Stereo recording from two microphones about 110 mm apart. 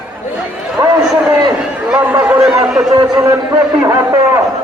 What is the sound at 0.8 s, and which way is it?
Run, 45° right (ahead or behind).